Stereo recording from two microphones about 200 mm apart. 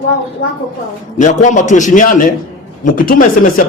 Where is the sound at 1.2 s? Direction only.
40° left (ahead or behind).